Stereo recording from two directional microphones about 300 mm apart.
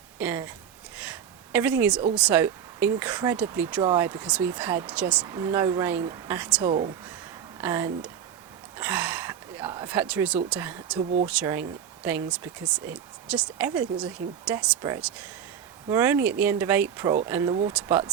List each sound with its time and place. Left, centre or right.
0.2 s speech: centre
1.5 s speech: centre
17.5 s speech: centre
17.7 s speech: centre